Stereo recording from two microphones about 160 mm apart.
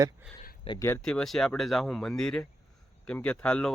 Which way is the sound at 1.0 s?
5° left (ahead or behind).